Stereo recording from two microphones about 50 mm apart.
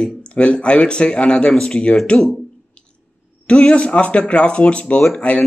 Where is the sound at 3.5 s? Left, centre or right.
Left.